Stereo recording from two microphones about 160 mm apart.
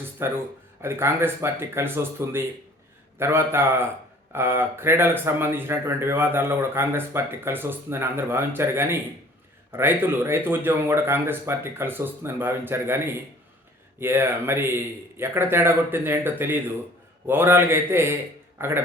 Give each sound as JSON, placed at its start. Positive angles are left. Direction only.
{"t": 0.2, "sound": "speech", "side_deg": -15}